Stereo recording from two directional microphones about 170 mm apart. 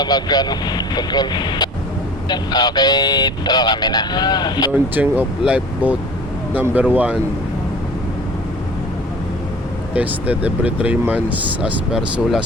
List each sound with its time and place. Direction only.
0.0 s speech: 25° left (ahead or behind)
4.7 s speech: 10° right (ahead or behind)
9.9 s speech: 10° right (ahead or behind)